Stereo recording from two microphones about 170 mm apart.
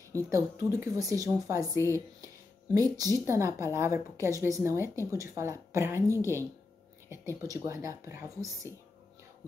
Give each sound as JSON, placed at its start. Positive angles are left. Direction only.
{"t": 0.3, "sound": "speech", "side_deg": -15}
{"t": 1.9, "sound": "a sound", "side_deg": -20}
{"t": 3.3, "sound": "speech", "side_deg": -15}